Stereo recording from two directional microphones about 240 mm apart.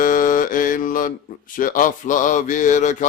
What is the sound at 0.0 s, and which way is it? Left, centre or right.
Mantra, left.